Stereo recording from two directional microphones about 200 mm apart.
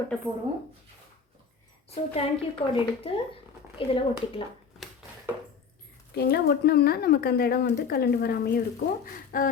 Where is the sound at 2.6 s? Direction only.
30° left (ahead or behind).